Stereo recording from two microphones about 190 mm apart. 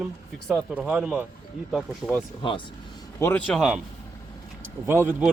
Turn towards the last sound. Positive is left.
turn(degrees=-5)  # may be behind; listen again after turning